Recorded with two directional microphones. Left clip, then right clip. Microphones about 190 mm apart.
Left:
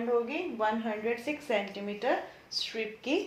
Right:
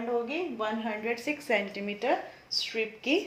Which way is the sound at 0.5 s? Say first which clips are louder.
Left 2 dB; 30° right (ahead or behind).